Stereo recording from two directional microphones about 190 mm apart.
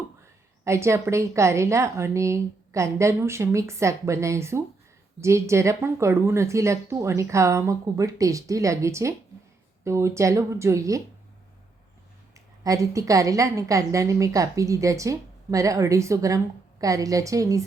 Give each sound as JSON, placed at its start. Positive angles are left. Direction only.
{"t": 0.6, "sound": "a woman's voice", "side_deg": -15}
{"t": 12.6, "sound": "a woman's voice", "side_deg": -15}